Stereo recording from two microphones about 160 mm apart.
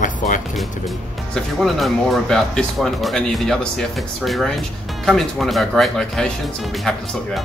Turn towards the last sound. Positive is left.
turn(degrees=0)  # may be behind; listen again after turning